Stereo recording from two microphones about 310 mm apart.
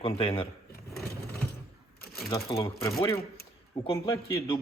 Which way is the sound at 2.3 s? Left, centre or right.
Centre.